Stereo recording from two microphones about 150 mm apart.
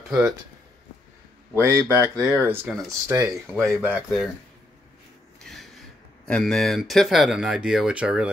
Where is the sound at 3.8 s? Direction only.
10° right (ahead or behind).